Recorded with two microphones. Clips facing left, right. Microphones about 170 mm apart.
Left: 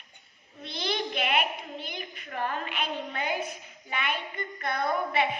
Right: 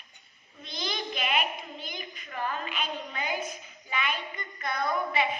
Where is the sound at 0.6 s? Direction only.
65° left (ahead or behind).